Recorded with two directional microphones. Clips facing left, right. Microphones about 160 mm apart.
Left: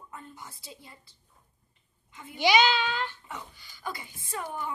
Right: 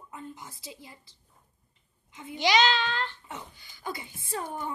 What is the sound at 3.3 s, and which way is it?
A woman's voice, 20° right (ahead or behind).